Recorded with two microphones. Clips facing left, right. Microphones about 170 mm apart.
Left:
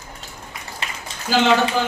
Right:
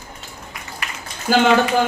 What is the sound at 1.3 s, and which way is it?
Speech, 50° right (ahead or behind).